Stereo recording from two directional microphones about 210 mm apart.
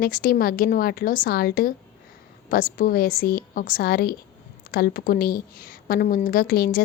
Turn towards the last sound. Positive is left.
turn(degrees=45)  # may be behind; listen again after turning